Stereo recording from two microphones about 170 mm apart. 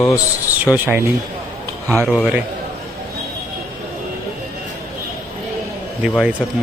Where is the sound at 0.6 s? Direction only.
10° right (ahead or behind).